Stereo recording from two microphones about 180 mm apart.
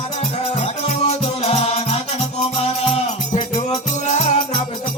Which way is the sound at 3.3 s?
40° left (ahead or behind).